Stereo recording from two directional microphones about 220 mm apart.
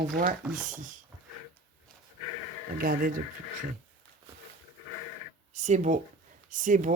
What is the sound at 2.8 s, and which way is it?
Speech, 40° right (ahead or behind).